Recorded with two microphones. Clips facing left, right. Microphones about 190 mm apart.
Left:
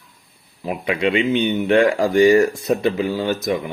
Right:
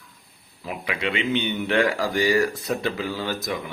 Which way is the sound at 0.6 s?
25° left (ahead or behind).